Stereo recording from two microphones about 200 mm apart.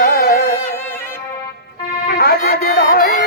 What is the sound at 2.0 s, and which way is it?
Music, 50° left (ahead or behind).